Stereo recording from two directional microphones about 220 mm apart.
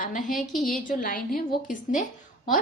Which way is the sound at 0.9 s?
40° left (ahead or behind).